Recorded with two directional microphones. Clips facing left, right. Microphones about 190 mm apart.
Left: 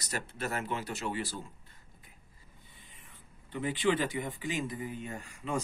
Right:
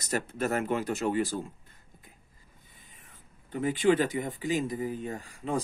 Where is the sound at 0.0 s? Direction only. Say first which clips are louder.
Right 7 dB; 45° right (ahead or behind).